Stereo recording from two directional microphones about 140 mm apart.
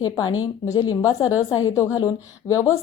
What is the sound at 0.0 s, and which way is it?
Speech, 30° left (ahead or behind).